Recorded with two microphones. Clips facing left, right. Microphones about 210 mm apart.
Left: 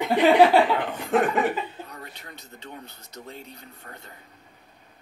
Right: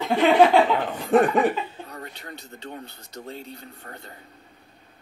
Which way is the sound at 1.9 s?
35° right (ahead or behind).